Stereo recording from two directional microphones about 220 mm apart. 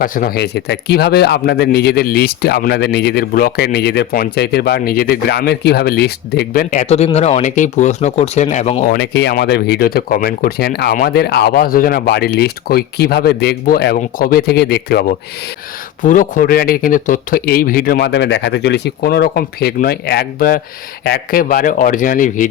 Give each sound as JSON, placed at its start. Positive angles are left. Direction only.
{"t": 0.0, "sound": "speech", "side_deg": 40}
{"t": 9.0, "sound": "speech", "side_deg": 50}
{"t": 16.0, "sound": "speech", "side_deg": 35}